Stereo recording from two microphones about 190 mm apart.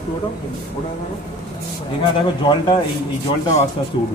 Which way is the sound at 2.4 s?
25° left (ahead or behind).